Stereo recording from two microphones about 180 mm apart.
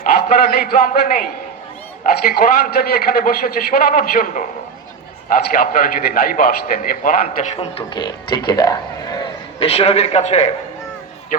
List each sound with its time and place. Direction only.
0.0 s a man's voice: 55° left (ahead or behind)
2.3 s a man's voice: 60° left (ahead or behind)
7.6 s speech: 30° left (ahead or behind)